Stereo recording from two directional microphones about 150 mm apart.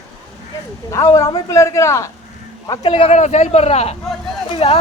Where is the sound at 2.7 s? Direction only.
35° left (ahead or behind).